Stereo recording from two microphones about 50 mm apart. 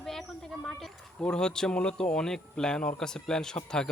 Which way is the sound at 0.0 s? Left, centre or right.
Centre.